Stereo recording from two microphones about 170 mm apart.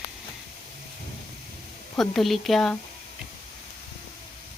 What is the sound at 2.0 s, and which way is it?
Speech, centre (ahead or behind).